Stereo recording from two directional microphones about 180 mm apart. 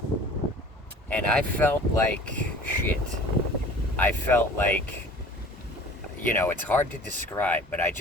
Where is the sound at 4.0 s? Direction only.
10° left (ahead or behind).